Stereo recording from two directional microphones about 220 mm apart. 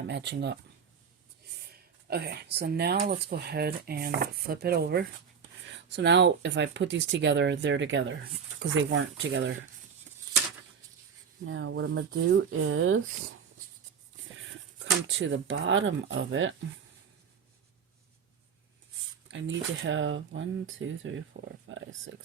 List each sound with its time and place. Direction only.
0.1 s speech: 50° right (ahead or behind)
2.0 s speech: 45° right (ahead or behind)
11.4 s speech: 60° right (ahead or behind)
15.0 s speech: 55° right (ahead or behind)
19.3 s speech: 60° right (ahead or behind)